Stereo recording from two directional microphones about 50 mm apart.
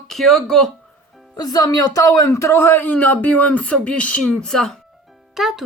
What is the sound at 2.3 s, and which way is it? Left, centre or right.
Speech, left.